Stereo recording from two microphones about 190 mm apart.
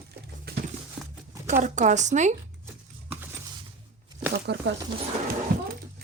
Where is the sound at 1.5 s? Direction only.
40° right (ahead or behind).